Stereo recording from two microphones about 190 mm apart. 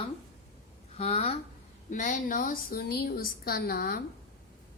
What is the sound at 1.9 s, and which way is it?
A woman's voice, 40° left (ahead or behind).